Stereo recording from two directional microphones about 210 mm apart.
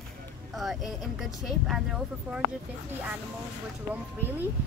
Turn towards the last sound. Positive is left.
turn(degrees=-10)  # may be behind; listen again after turning